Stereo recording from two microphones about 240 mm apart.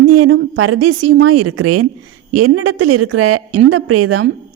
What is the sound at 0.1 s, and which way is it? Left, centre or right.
A woman's voice, right.